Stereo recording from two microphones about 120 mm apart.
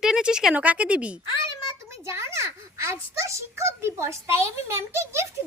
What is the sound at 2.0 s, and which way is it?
A child's voice, 25° right (ahead or behind).